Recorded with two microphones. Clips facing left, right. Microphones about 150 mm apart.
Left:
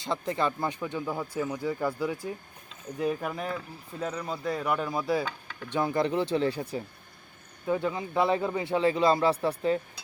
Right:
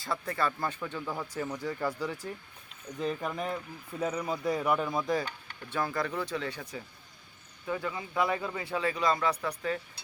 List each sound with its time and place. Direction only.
0.0 s speech: 20° left (ahead or behind); by 5.2 s 5° left (ahead or behind)
5.7 s speech: 20° left (ahead or behind)